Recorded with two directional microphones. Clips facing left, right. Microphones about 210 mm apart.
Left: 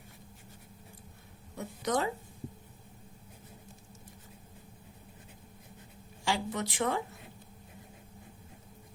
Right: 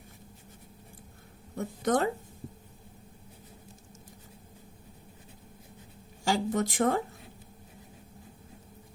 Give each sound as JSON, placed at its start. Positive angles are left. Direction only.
{"t": 1.5, "sound": "speech", "side_deg": -50}
{"t": 6.2, "sound": "speech", "side_deg": -45}